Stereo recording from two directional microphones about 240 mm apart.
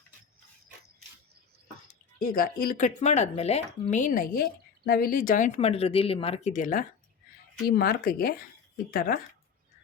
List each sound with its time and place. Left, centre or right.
2.1 s speech: left